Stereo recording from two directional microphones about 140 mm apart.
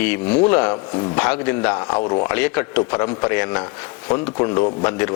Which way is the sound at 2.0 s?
35° left (ahead or behind).